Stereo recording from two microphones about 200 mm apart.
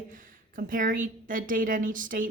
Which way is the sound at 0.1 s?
40° right (ahead or behind).